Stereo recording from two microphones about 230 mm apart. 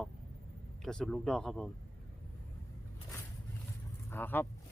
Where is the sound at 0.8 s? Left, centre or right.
Centre.